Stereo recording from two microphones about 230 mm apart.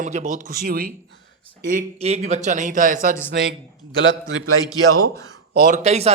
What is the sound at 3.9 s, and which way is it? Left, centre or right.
Speech, right.